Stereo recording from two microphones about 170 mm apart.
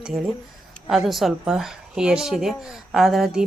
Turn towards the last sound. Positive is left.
turn(degrees=0)  # may be behind; listen again after turning